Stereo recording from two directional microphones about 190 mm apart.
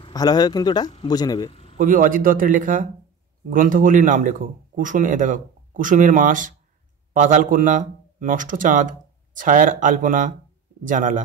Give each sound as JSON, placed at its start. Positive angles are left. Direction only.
{"t": 0.0, "sound": "speech", "side_deg": 20}
{"t": 1.5, "sound": "a sound", "side_deg": 30}
{"t": 1.8, "sound": "speech", "side_deg": -45}